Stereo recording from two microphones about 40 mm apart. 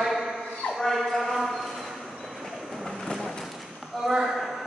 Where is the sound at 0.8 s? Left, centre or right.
Centre.